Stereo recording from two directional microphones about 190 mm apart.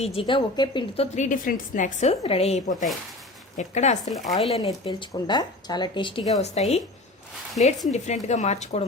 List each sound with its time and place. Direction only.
0.0 s speech: 30° left (ahead or behind)
1.1 s a woman's voice: 40° left (ahead or behind)
4.1 s speech: centre (ahead or behind)
4.5 s a woman's voice: 25° left (ahead or behind)